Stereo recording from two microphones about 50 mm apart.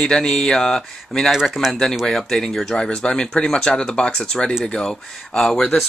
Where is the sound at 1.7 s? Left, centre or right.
Centre.